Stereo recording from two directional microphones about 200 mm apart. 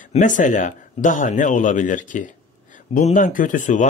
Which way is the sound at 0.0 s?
40° left (ahead or behind).